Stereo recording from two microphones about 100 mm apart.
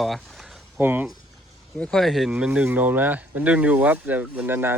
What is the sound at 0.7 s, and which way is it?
Speech, 20° right (ahead or behind).